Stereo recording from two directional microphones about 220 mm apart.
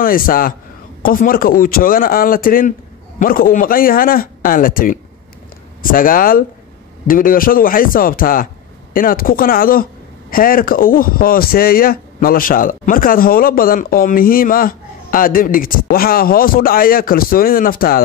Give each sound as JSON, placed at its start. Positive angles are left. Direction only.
{"t": 0.0, "sound": "speech", "side_deg": 40}